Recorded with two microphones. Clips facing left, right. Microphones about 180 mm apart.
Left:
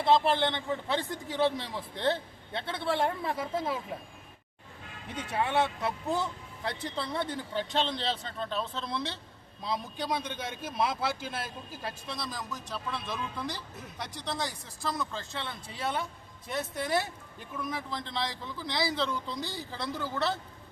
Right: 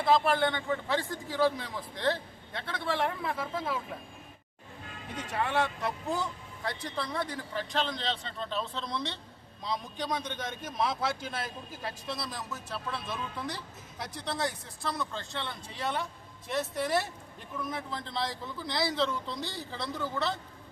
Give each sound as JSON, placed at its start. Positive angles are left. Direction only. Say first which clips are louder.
{"t": 0.0, "sound": "a man's voice", "louder": "left 1 dB", "side_deg": 25}
{"t": 6.7, "sound": "a man's voice", "louder": "left 1 dB", "side_deg": 25}
{"t": 8.0, "sound": "a man's voice", "louder": "left 1 dB", "side_deg": 5}